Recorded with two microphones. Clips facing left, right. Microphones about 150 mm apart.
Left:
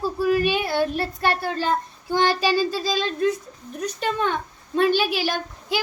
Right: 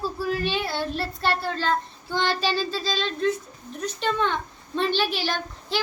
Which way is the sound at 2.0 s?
40° left (ahead or behind).